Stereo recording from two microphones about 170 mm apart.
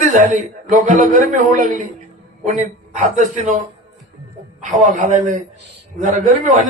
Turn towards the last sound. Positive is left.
turn(degrees=-45)  # may be behind; listen again after turning